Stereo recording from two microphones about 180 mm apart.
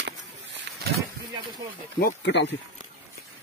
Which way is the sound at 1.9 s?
65° left (ahead or behind).